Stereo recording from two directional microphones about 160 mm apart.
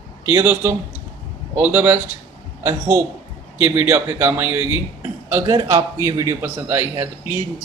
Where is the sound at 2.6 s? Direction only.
25° right (ahead or behind).